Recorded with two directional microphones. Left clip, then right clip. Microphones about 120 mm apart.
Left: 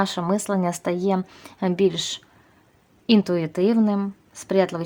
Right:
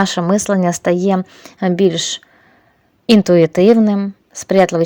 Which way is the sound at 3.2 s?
50° right (ahead or behind).